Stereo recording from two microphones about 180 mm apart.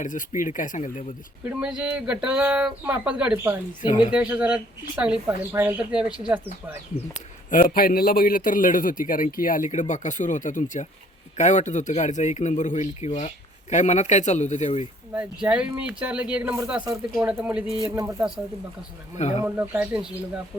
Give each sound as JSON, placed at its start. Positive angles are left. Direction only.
{"t": 0.0, "sound": "a man's voice", "side_deg": 45}
{"t": 1.5, "sound": "speech", "side_deg": -5}
{"t": 7.1, "sound": "a man's voice", "side_deg": 50}
{"t": 15.1, "sound": "speech", "side_deg": -5}
{"t": 19.1, "sound": "a man's voice", "side_deg": 40}
{"t": 19.5, "sound": "speech", "side_deg": -10}